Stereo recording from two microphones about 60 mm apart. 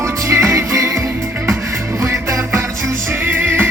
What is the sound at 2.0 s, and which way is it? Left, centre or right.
Music, right.